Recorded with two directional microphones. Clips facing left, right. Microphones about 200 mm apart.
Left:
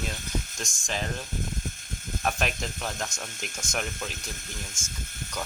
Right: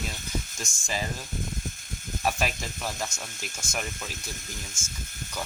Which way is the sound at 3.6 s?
15° left (ahead or behind).